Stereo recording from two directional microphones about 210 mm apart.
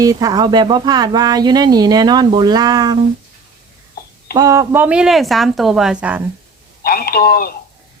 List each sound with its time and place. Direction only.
0.0 s speech: 15° right (ahead or behind)
4.0 s a sound: 45° left (ahead or behind)
4.4 s speech: 15° right (ahead or behind)
6.8 s speech: 45° left (ahead or behind)